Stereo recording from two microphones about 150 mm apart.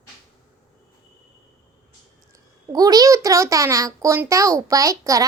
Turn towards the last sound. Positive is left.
turn(degrees=-20)  # may be behind; listen again after turning